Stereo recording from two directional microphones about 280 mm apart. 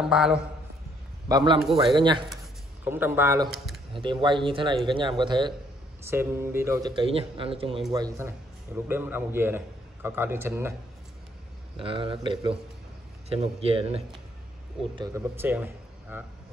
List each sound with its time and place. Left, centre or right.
0.0 s a man's voice: centre
1.3 s speech: centre
3.9 s speech: centre
11.8 s speech: centre
15.0 s a man's voice: centre